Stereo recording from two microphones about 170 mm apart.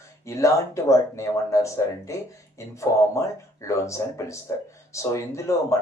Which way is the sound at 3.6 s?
15° left (ahead or behind).